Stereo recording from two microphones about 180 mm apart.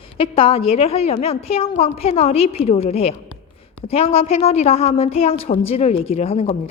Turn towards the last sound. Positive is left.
turn(degrees=35)  # may be behind; listen again after turning